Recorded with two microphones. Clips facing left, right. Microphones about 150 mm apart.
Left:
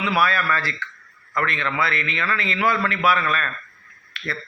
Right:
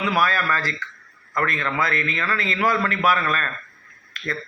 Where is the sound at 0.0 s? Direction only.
40° right (ahead or behind).